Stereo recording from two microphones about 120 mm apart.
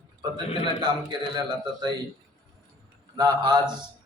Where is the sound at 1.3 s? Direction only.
35° right (ahead or behind).